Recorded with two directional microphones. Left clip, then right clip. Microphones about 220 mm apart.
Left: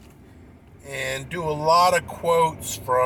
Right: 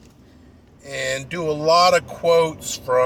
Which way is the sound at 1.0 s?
30° right (ahead or behind).